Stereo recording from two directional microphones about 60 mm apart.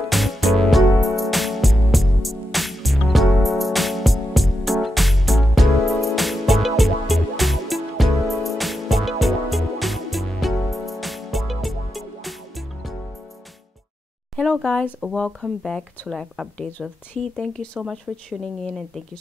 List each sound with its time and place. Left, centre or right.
0.1 s music: centre
14.3 s a sound: centre
16.1 s speech: centre
16.5 s speech: centre